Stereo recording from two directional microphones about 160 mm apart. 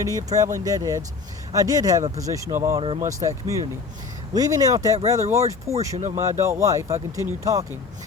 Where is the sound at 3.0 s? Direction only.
20° right (ahead or behind).